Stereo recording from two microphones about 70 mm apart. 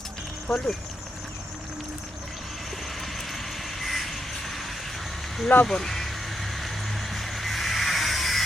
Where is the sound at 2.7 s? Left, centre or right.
Centre.